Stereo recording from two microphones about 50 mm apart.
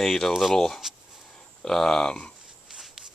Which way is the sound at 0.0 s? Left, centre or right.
Centre.